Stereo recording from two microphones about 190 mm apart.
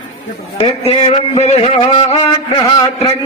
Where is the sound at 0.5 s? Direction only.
25° left (ahead or behind).